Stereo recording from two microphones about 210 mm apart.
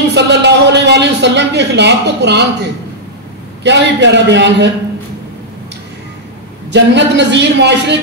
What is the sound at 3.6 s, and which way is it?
A man's voice, 55° right (ahead or behind).